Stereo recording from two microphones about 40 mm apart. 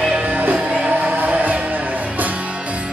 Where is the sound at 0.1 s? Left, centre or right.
Right.